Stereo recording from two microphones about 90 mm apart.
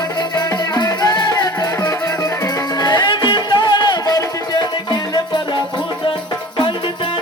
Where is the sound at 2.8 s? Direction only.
55° left (ahead or behind).